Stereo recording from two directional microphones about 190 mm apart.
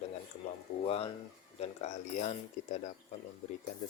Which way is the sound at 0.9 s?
30° left (ahead or behind).